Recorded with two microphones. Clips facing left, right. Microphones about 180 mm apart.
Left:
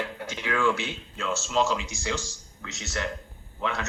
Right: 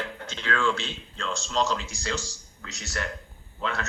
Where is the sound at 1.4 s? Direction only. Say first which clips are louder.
Left 1 dB; 5° left (ahead or behind).